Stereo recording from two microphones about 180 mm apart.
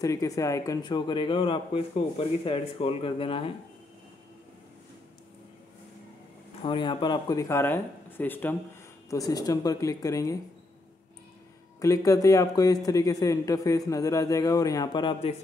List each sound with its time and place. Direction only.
0.0 s speech: 20° left (ahead or behind)
6.6 s speech: 25° left (ahead or behind)
11.8 s speech: 15° left (ahead or behind)